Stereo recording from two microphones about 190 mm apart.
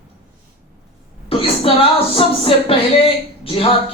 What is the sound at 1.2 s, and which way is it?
A woman's voice, 30° left (ahead or behind).